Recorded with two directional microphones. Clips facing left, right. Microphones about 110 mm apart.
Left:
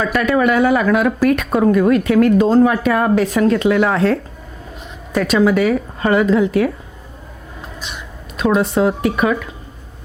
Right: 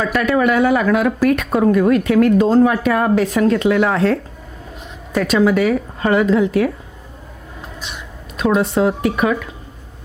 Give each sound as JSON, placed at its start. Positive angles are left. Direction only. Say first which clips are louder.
{"t": 0.0, "sound": "speech", "louder": "left 1 dB", "side_deg": 25}
{"t": 7.9, "sound": "speech", "louder": "left 1 dB", "side_deg": 20}